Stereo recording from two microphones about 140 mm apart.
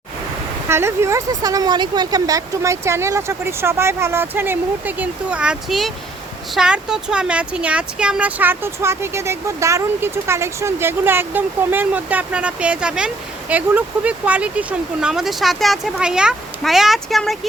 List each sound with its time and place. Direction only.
0.7 s speech: 20° right (ahead or behind); by 17.3 s centre (ahead or behind)